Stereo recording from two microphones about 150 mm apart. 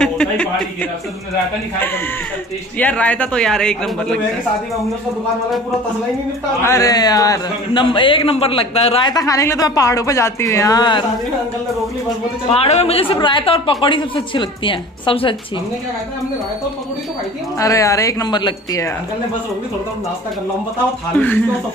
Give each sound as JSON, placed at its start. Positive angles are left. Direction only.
{"t": 0.0, "sound": "a sound", "side_deg": 5}
{"t": 2.8, "sound": "a man's voice", "side_deg": 10}
{"t": 6.6, "sound": "speech", "side_deg": 20}
{"t": 9.1, "sound": "speech", "side_deg": 20}
{"t": 12.4, "sound": "speech", "side_deg": 40}
{"t": 17.6, "sound": "speech", "side_deg": 20}